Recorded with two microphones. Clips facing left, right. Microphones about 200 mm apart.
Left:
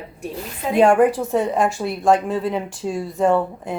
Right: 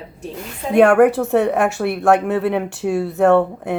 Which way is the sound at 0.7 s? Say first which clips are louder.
Right 3 dB; 65° right (ahead or behind).